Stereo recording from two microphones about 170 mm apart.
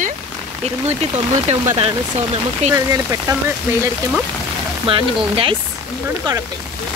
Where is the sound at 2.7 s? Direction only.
15° right (ahead or behind).